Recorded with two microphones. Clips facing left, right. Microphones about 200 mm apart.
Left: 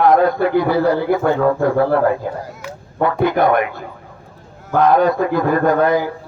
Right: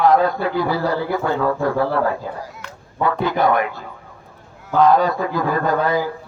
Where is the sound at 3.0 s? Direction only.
55° left (ahead or behind).